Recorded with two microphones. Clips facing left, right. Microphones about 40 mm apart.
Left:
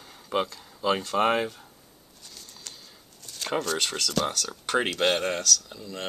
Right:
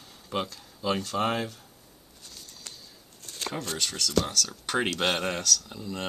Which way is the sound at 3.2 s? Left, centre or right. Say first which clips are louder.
Right 1 dB; right.